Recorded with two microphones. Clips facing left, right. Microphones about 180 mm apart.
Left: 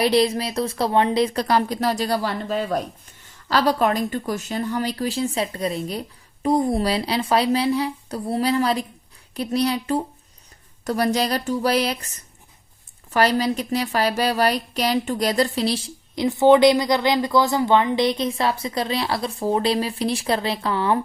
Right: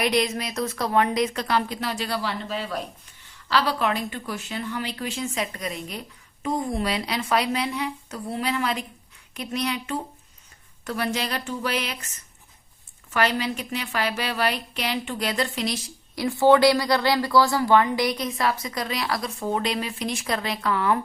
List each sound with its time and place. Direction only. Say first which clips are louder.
0.0 s a woman's voice: left 5 dB; 30° left (ahead or behind)